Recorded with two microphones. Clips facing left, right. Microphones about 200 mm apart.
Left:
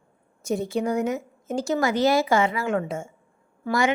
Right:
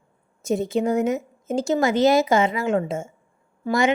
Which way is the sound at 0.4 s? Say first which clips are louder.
Right 3 dB; 20° right (ahead or behind).